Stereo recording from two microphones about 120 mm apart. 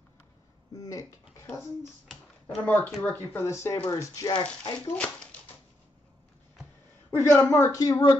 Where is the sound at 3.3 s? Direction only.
25° left (ahead or behind).